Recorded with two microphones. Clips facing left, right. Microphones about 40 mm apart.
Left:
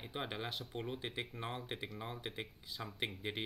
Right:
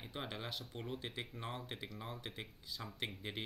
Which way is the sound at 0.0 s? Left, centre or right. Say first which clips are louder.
Left 3 dB; centre.